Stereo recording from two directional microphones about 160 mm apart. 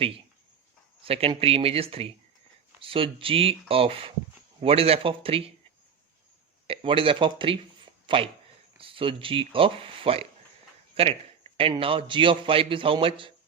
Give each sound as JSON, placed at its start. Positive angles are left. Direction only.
{"t": 1.0, "sound": "a man's voice", "side_deg": -35}
{"t": 6.7, "sound": "a man's voice", "side_deg": -35}